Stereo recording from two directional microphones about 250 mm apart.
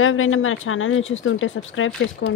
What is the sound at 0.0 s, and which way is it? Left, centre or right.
A woman's voice, left.